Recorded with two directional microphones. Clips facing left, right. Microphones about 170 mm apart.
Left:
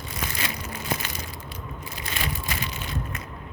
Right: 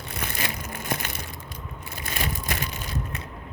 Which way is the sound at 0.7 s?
50° right (ahead or behind).